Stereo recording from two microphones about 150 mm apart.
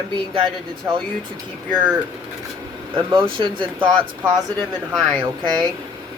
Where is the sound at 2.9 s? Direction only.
35° right (ahead or behind).